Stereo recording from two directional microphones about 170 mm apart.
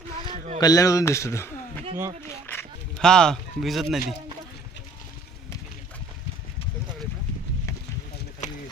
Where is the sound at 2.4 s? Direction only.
10° left (ahead or behind).